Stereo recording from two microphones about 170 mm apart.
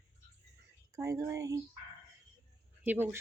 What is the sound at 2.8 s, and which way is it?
Speech, 10° right (ahead or behind).